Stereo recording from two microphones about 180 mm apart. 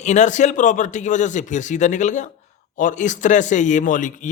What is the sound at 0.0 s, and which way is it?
A man's voice, 40° left (ahead or behind).